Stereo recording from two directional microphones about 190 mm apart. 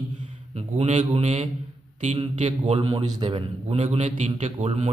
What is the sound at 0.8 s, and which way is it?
A man's voice, 35° right (ahead or behind).